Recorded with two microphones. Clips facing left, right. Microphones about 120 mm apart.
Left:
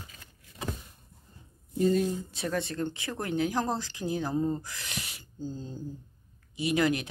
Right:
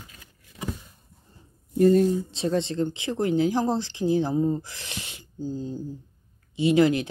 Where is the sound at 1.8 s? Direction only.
45° right (ahead or behind).